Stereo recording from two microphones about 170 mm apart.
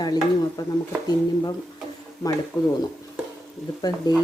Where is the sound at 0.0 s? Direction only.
20° left (ahead or behind).